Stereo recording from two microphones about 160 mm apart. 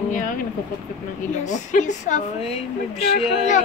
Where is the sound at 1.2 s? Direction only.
50° left (ahead or behind).